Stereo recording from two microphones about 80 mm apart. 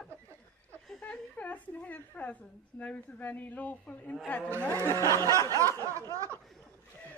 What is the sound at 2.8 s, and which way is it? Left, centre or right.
A man's voice, centre.